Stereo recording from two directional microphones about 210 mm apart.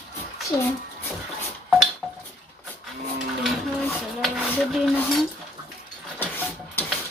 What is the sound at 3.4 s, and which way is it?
Dishes, centre (ahead or behind).